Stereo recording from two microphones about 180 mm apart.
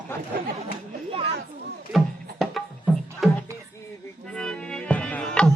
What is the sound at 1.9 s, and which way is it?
Music, centre (ahead or behind).